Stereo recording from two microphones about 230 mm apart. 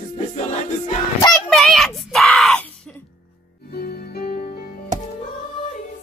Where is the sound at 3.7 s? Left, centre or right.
Left.